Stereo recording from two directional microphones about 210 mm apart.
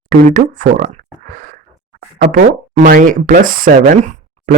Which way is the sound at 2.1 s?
40° right (ahead or behind).